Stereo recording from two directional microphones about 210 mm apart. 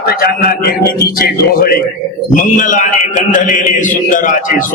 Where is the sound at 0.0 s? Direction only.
45° left (ahead or behind).